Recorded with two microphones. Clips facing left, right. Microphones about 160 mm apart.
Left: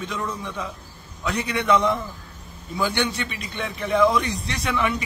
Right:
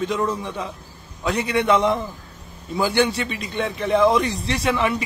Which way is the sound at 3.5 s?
30° right (ahead or behind).